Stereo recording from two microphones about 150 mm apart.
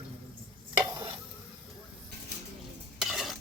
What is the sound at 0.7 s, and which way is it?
Stir, 30° right (ahead or behind).